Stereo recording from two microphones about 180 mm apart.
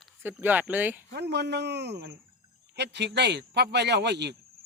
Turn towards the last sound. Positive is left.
turn(degrees=-70)  # may be behind; listen again after turning